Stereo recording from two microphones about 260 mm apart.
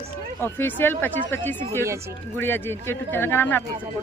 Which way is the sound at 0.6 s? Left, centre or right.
Centre.